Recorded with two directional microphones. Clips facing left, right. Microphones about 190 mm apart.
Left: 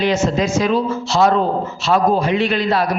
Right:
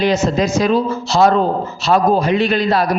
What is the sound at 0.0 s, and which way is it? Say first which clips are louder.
A man's voice: right 2 dB; 40° right (ahead or behind).